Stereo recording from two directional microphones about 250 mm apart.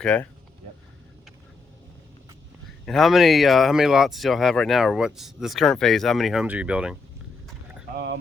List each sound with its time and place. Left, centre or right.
0.0 s speech: centre
2.8 s speech: centre
7.9 s a sound: right